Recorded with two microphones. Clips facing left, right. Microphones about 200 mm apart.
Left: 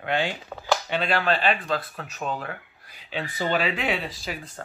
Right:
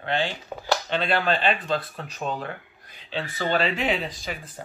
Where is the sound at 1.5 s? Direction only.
30° right (ahead or behind).